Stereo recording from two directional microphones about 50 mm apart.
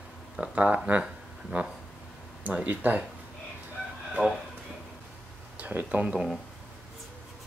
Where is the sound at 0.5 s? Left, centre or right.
Right.